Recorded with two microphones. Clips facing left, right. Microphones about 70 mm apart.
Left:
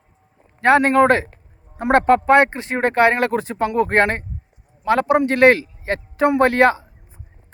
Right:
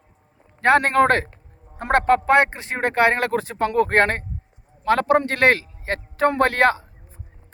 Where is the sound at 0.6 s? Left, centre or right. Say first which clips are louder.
Left 2 dB; right.